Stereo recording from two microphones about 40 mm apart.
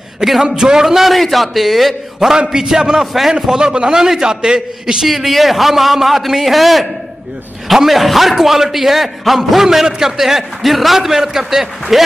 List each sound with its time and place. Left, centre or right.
0.2 s a man's voice: centre
3.1 s a man's voice: centre
3.3 s a man's voice: centre
5.0 s a man's voice: centre